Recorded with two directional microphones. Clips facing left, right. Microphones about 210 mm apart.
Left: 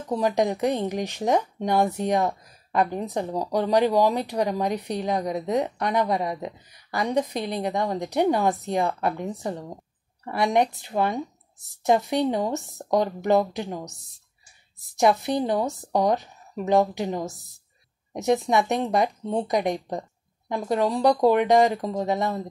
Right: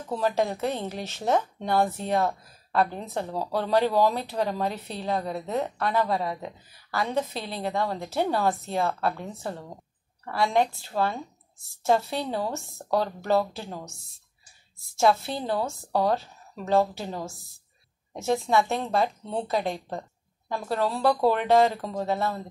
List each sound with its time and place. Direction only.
0.1 s speech: 15° left (ahead or behind)